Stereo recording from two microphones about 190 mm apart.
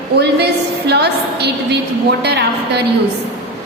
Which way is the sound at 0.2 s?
60° right (ahead or behind).